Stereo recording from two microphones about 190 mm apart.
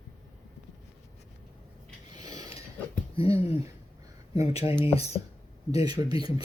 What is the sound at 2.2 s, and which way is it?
Pulleys, 20° right (ahead or behind).